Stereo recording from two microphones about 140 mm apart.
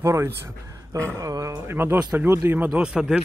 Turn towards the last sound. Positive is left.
turn(degrees=-5)  # may be behind; listen again after turning